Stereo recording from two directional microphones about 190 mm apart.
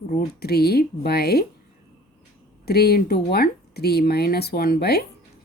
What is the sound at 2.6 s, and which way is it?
Speech, 55° left (ahead or behind).